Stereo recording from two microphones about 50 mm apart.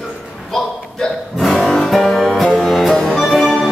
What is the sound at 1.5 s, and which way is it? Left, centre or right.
Music, centre.